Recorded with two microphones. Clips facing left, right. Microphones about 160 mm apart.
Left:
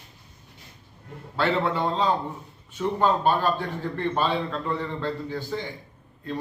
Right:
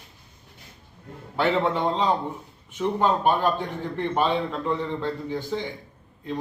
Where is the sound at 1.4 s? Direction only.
20° right (ahead or behind).